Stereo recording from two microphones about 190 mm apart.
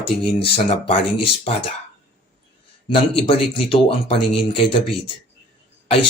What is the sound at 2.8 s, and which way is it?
Speech, 30° left (ahead or behind).